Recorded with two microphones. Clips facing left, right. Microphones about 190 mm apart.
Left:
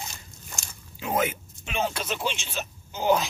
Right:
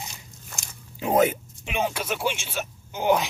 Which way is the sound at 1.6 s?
15° right (ahead or behind).